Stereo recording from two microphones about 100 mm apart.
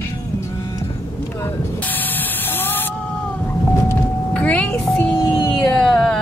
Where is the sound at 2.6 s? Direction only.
20° left (ahead or behind).